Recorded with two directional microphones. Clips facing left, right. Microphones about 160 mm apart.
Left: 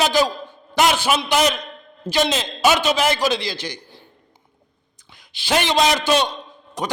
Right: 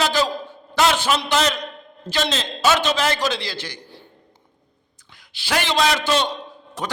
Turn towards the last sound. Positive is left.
turn(degrees=15)  # may be behind; listen again after turning